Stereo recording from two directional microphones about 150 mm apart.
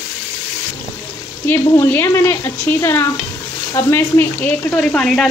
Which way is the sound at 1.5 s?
15° left (ahead or behind).